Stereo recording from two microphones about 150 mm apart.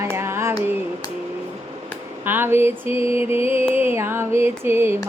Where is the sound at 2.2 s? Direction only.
15° right (ahead or behind).